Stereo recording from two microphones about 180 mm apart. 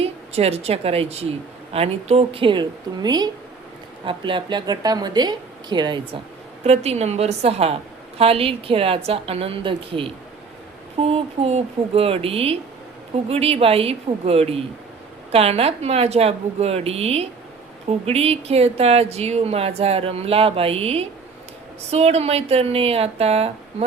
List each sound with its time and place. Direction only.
0.0 s a woman's voice: 35° right (ahead or behind)
6.7 s speech: 35° right (ahead or behind)